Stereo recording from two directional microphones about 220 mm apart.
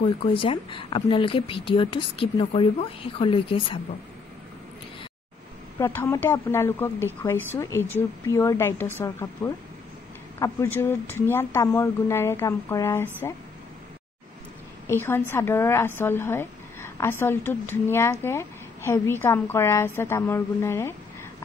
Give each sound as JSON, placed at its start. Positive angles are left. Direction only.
{"t": 0.0, "sound": "a woman's voice", "side_deg": 25}
{"t": 5.8, "sound": "a woman's voice", "side_deg": 15}
{"t": 14.9, "sound": "a woman's voice", "side_deg": 10}